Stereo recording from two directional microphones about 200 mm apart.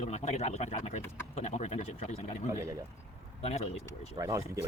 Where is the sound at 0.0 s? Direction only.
35° left (ahead or behind).